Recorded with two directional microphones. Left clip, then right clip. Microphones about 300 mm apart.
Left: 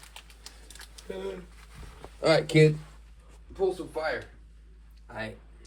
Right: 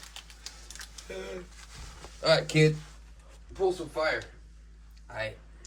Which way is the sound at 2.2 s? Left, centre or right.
Left.